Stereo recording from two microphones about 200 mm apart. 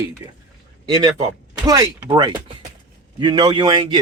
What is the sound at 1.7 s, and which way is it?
Speech, 15° right (ahead or behind).